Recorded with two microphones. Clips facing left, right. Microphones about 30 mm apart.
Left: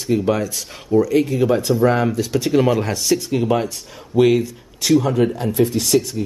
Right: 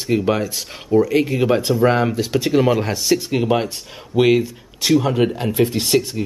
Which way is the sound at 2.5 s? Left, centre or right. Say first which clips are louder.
Even; centre.